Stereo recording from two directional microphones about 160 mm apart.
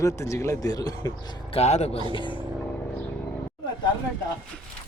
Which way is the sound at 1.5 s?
45° left (ahead or behind).